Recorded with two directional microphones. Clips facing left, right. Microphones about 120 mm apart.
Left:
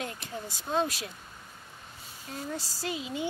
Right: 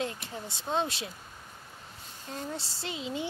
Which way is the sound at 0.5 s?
25° right (ahead or behind).